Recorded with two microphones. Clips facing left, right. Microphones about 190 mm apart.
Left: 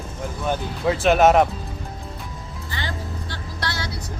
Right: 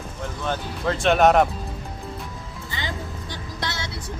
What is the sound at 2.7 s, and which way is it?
Music, 20° right (ahead or behind).